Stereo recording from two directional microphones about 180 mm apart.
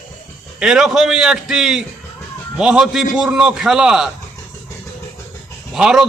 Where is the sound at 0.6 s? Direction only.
5° right (ahead or behind).